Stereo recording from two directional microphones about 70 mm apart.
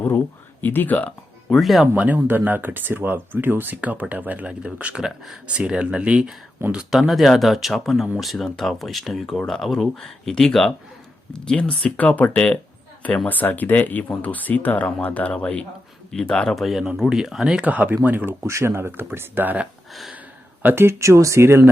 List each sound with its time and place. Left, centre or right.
0.6 s speech: left
1.5 s speech: centre
2.0 s speech: right
5.0 s speech: centre
6.6 s speech: right
7.1 s speech: centre
16.6 s speech: centre
17.7 s speech: right
18.4 s speech: right
19.9 s a sound: centre
20.6 s speech: right
20.8 s speech: right